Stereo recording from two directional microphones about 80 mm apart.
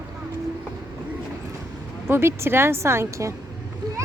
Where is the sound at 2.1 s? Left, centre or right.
Right.